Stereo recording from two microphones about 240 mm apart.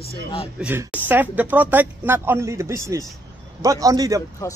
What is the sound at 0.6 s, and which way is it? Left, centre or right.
Speech, centre.